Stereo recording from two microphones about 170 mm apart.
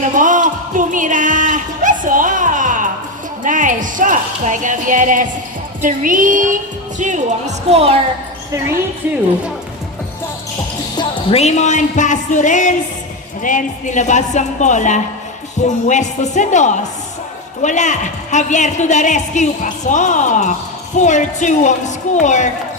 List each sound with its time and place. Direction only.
0.2 s a sound: 50° right (ahead or behind)
3.4 s music: 50° right (ahead or behind)
7.0 s speech: 45° right (ahead or behind)
10.9 s a woman's voice: 35° left (ahead or behind)